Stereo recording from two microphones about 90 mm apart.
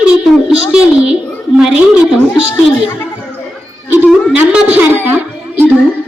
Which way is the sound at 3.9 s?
15° right (ahead or behind).